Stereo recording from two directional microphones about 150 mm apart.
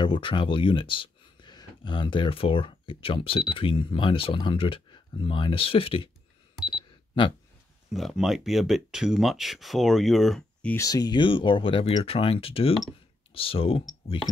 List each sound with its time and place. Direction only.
0.0 s speech: 35° left (ahead or behind)
7.9 s speech: centre (ahead or behind)
10.8 s speech: 25° left (ahead or behind)